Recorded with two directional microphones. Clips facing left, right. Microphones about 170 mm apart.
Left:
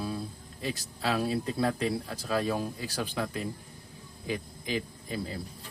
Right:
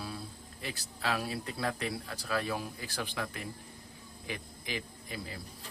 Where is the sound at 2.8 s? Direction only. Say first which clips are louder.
Left 5 dB; 20° left (ahead or behind).